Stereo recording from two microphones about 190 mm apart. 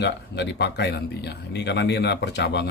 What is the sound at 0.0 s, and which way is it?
Speech, 60° left (ahead or behind).